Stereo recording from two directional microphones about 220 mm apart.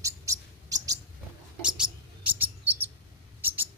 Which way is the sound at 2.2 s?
10° right (ahead or behind).